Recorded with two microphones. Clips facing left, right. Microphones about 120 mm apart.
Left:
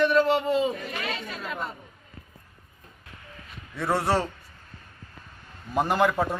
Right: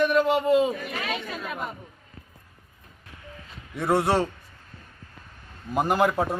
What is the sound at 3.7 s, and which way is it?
Speech, 20° right (ahead or behind).